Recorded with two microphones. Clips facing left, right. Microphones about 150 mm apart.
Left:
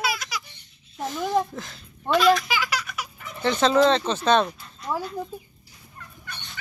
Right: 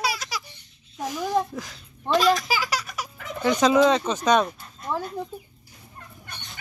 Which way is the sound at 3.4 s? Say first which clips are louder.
Right 1 dB; 10° right (ahead or behind).